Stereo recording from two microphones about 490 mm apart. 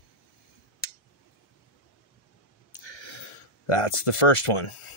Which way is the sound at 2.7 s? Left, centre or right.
Left.